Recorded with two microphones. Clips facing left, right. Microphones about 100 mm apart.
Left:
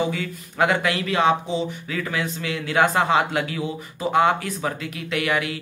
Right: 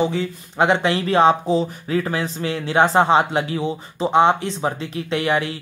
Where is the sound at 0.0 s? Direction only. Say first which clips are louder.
Right 4 dB; 30° right (ahead or behind).